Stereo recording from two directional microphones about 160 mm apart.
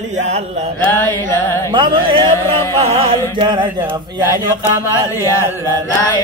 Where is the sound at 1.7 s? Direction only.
30° right (ahead or behind).